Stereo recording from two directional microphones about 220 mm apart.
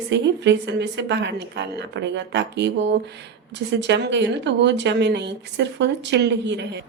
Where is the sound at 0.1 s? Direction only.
50° right (ahead or behind).